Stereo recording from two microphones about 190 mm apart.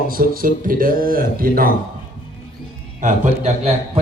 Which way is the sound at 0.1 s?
50° right (ahead or behind).